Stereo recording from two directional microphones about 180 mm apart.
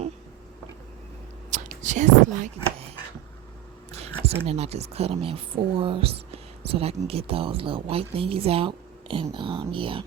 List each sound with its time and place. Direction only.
1.5 s speech: 40° right (ahead or behind)
4.2 s speech: 35° right (ahead or behind)